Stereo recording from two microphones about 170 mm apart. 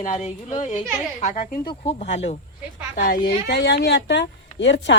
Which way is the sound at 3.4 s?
70° left (ahead or behind).